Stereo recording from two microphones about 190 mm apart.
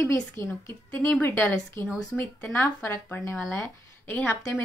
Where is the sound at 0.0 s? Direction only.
10° left (ahead or behind).